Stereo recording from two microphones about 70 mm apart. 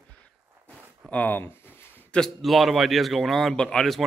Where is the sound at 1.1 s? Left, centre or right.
Left.